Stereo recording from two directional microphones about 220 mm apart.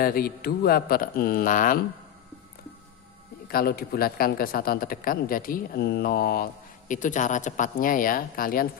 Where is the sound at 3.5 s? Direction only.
45° left (ahead or behind).